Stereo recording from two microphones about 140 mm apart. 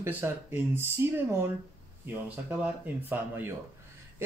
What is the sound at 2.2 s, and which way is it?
Speech, 10° right (ahead or behind).